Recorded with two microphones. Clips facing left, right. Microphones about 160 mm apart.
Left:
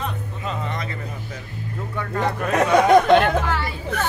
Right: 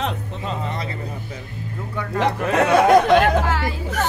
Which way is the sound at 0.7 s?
30° right (ahead or behind).